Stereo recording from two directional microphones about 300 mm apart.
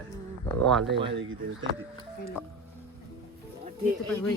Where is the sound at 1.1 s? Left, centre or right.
Right.